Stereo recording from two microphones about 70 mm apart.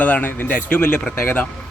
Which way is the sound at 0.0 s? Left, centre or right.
Left.